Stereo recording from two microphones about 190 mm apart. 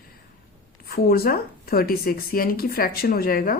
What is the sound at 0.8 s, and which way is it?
Speech, 50° left (ahead or behind).